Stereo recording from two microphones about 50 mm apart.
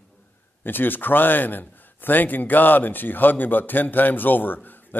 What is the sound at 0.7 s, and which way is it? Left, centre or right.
A man's voice, left.